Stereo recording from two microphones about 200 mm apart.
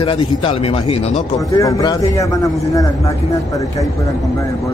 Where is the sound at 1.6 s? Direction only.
15° left (ahead or behind).